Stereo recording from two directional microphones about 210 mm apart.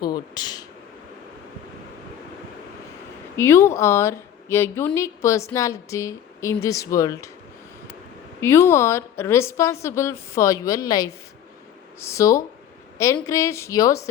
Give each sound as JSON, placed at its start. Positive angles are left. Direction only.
{"t": 0.3, "sound": "speech", "side_deg": 20}
{"t": 3.3, "sound": "a woman's voice", "side_deg": 10}
{"t": 8.4, "sound": "a woman's voice", "side_deg": 10}